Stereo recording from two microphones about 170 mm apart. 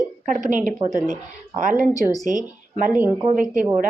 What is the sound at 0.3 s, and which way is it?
Speech, 50° right (ahead or behind).